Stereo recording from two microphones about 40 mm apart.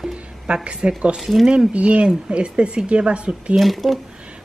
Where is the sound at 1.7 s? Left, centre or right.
Right.